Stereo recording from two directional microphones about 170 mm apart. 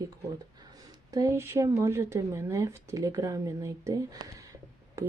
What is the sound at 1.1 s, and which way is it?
Speech, 20° right (ahead or behind).